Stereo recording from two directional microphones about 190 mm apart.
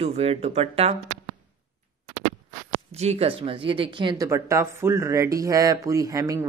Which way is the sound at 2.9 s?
35° right (ahead or behind).